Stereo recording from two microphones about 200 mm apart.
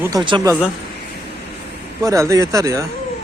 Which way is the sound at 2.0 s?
15° right (ahead or behind).